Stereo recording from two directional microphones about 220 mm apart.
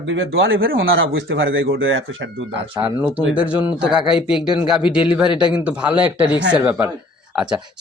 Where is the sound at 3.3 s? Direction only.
5° right (ahead or behind).